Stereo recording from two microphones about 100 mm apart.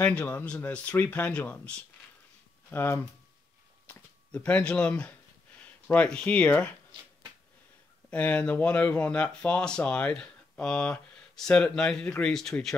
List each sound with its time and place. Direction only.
0.0 s speech: 10° left (ahead or behind)
2.7 s speech: 25° left (ahead or behind)
3.8 s a sound: 15° left (ahead or behind)
5.6 s speech: 15° left (ahead or behind)
8.1 s speech: 15° left (ahead or behind)